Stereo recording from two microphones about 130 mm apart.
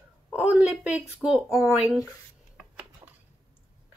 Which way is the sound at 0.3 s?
10° right (ahead or behind).